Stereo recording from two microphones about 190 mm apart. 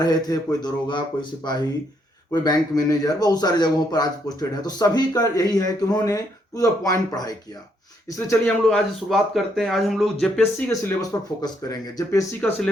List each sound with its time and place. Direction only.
0.0 s speech: 20° left (ahead or behind)
8.6 s speech: centre (ahead or behind)
11.3 s speech: 20° left (ahead or behind)
12.4 s speech: 10° left (ahead or behind)